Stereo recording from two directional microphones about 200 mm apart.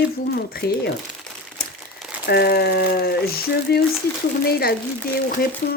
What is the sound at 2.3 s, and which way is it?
Speech, 50° left (ahead or behind).